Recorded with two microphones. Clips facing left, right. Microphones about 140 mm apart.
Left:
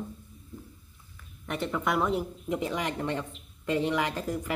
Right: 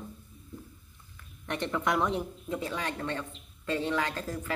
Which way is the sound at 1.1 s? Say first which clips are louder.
Left 1 dB; 5° left (ahead or behind).